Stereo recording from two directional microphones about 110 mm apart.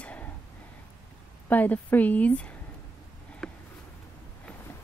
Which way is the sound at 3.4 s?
5° left (ahead or behind).